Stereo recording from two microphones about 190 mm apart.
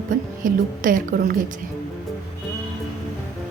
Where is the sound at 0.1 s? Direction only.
45° right (ahead or behind).